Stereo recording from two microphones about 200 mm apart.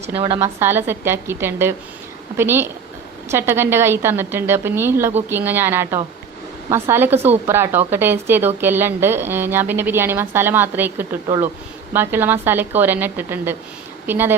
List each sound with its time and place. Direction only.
0.0 s a woman's voice: 30° right (ahead or behind)
0.4 s speech: 10° right (ahead or behind)